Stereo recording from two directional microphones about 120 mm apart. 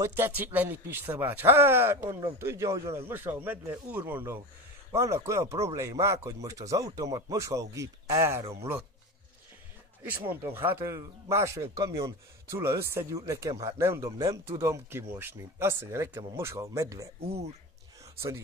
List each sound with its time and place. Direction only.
0.0 s speech: 15° right (ahead or behind)
10.3 s speech: 20° right (ahead or behind)
17.3 s speech: 60° right (ahead or behind)